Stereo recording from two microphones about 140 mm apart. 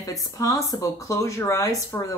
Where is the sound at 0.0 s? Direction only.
25° left (ahead or behind).